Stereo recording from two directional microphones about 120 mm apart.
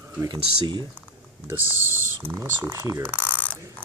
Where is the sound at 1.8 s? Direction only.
15° right (ahead or behind).